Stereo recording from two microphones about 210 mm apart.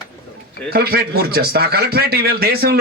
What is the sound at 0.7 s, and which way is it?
A man's voice, 45° right (ahead or behind).